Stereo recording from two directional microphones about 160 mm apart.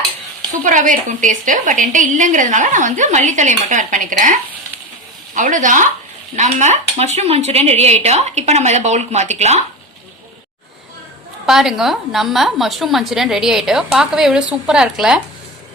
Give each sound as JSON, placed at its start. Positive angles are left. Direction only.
{"t": 0.6, "sound": "a woman's voice", "side_deg": -55}
{"t": 11.4, "sound": "a woman's voice", "side_deg": 0}